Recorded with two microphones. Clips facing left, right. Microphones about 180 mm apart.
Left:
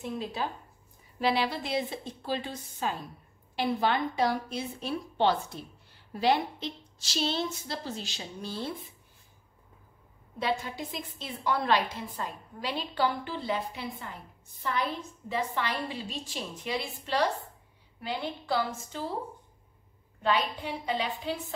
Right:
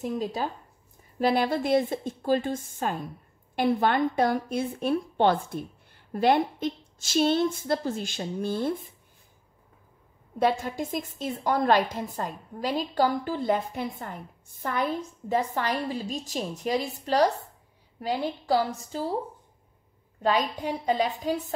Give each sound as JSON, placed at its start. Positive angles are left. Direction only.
{"t": 0.0, "sound": "a woman's voice", "side_deg": -40}
{"t": 10.4, "sound": "a woman's voice", "side_deg": -45}
{"t": 20.2, "sound": "a woman's voice", "side_deg": -40}